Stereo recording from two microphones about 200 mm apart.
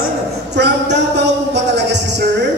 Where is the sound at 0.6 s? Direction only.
55° right (ahead or behind).